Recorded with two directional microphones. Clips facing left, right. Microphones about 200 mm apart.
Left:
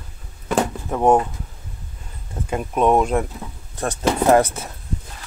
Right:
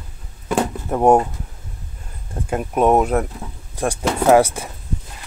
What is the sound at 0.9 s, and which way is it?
Speech, 15° right (ahead or behind).